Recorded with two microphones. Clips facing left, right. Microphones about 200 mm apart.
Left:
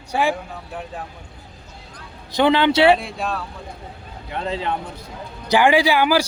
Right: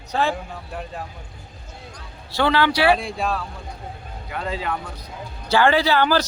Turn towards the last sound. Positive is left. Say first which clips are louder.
# left 2 dB
turn(degrees=10)  # may be behind; listen again after turning